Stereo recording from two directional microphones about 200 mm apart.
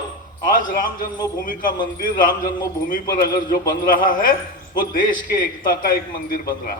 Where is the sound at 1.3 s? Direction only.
45° left (ahead or behind).